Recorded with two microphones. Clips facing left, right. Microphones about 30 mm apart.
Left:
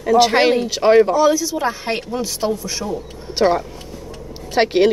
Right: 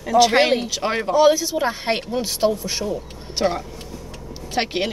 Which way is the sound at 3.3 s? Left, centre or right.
Centre.